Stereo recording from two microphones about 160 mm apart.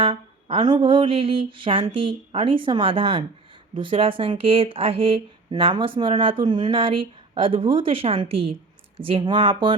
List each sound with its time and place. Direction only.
0.0 s speech: 35° right (ahead or behind)